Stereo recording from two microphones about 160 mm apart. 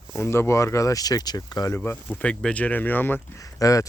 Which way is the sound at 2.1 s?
5° left (ahead or behind).